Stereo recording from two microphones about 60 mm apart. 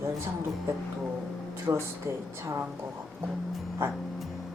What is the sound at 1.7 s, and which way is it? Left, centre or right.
Speech, right.